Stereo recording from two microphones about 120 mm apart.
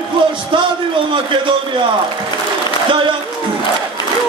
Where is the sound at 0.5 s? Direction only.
45° right (ahead or behind).